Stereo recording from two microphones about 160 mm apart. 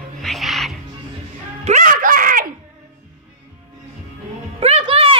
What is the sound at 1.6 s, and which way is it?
Music, 50° right (ahead or behind).